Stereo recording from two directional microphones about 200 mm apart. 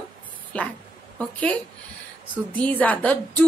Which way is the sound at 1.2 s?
5° left (ahead or behind).